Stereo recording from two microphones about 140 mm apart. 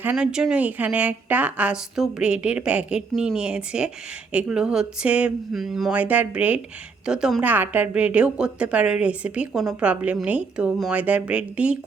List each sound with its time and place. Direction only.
0.0 s a woman's voice: 10° right (ahead or behind)